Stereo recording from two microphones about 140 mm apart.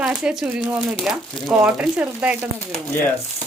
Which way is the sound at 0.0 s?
5° right (ahead or behind).